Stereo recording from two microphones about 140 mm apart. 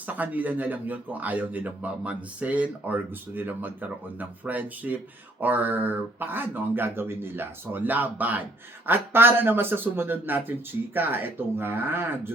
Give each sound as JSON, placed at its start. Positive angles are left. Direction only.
{"t": 0.0, "sound": "speech", "side_deg": -10}